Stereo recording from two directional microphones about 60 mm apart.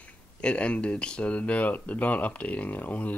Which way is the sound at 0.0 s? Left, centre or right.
Centre.